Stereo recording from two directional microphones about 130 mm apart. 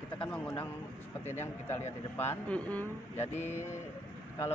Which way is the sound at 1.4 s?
20° left (ahead or behind).